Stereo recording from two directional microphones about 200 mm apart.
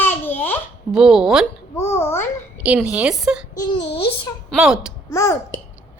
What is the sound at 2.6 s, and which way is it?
Speech, 5° right (ahead or behind).